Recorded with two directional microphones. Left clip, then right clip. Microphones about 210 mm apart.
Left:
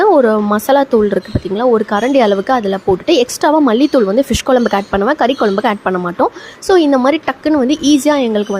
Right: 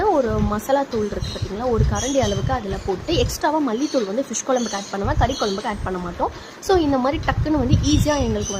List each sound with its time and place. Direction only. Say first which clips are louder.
0.0 s speech: left 9 dB; 30° left (ahead or behind)